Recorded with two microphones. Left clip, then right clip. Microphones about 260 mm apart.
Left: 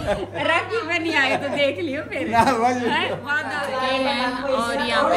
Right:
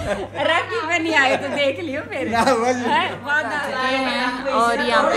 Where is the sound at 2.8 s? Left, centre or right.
Centre.